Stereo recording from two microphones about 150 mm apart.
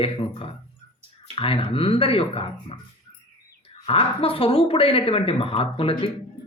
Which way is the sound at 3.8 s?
40° left (ahead or behind).